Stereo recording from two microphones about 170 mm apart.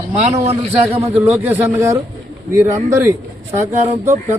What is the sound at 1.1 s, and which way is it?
A man's voice, 10° right (ahead or behind).